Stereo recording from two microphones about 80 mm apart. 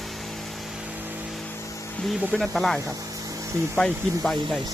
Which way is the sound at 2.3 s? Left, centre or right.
Centre.